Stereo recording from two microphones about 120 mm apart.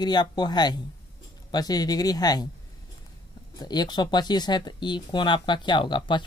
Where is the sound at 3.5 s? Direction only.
35° left (ahead or behind).